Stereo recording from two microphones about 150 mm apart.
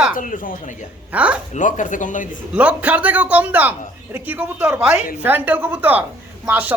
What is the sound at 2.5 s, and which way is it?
A woman's voice, 10° right (ahead or behind).